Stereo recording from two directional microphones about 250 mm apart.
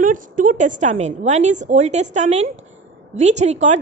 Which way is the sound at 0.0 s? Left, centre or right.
Right.